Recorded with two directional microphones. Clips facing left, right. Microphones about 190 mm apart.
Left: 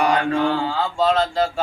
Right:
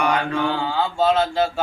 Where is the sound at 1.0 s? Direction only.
5° right (ahead or behind).